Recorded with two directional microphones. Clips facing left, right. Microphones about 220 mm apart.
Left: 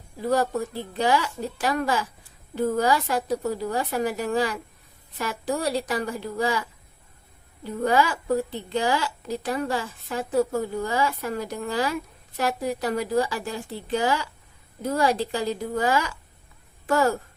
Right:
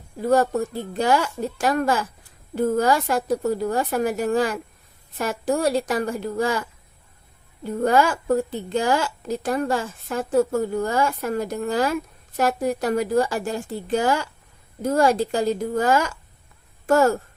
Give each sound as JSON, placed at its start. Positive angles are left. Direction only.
{"t": 0.2, "sound": "a woman's voice", "side_deg": -45}